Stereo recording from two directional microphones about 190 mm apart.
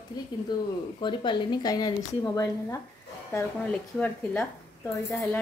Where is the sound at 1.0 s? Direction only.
25° left (ahead or behind).